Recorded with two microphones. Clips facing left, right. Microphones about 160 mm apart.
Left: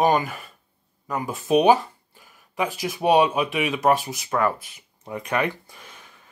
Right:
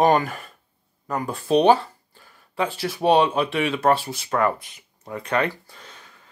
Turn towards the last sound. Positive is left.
turn(degrees=15)  # may be behind; listen again after turning